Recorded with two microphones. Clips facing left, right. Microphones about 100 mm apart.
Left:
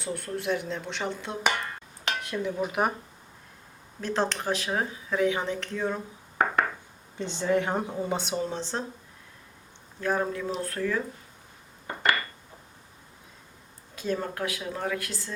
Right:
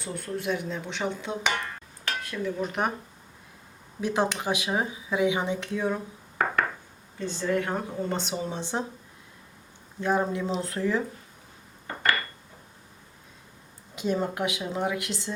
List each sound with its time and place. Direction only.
0.0 s speech: centre (ahead or behind)
2.0 s dishes: 20° left (ahead or behind)
4.0 s speech: 10° right (ahead or behind)
7.2 s speech: 20° left (ahead or behind); by 8.4 s centre (ahead or behind)
8.4 s speech: 15° right (ahead or behind)
10.0 s a woman's voice: 20° right (ahead or behind)
13.9 s a woman's voice: 20° right (ahead or behind)